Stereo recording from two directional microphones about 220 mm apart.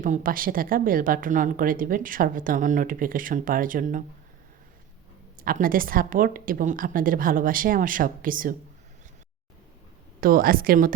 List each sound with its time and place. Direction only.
0.0 s a woman's voice: 40° right (ahead or behind)
5.4 s a woman's voice: 40° right (ahead or behind)
10.2 s a woman's voice: 40° right (ahead or behind)